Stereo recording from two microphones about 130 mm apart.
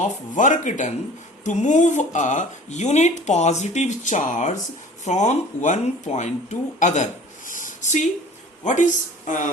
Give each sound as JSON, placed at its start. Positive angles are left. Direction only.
{"t": 0.0, "sound": "speech", "side_deg": 75}